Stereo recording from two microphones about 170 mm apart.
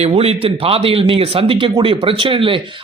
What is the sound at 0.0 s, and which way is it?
Speech, 35° right (ahead or behind).